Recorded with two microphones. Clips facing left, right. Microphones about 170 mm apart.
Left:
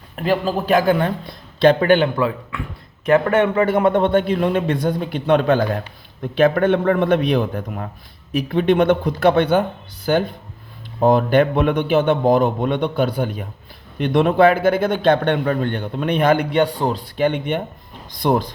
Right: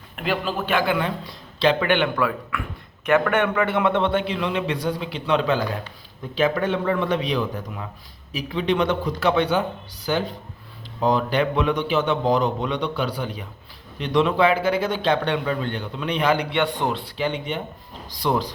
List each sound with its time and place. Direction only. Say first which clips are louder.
0.2 s a man's voice: left 6 dB; 40° left (ahead or behind)
2.1 s a man's voice: left 3 dB; 25° left (ahead or behind)
3.7 s a man's voice: left 5 dB; 45° left (ahead or behind)
17.2 s a man's voice: left 6 dB; 55° left (ahead or behind)